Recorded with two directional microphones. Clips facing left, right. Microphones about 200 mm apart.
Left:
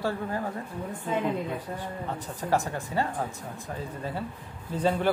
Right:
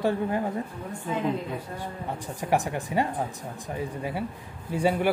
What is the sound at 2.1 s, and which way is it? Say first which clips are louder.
Speech: right 2 dB; 15° right (ahead or behind).